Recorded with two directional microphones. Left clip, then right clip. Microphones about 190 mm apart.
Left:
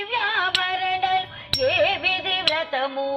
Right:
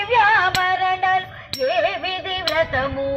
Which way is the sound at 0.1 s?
25° left (ahead or behind).